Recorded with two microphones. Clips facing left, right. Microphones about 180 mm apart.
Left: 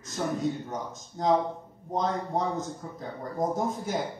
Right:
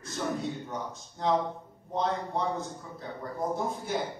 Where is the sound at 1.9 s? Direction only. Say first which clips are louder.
Left 2 dB; 40° left (ahead or behind).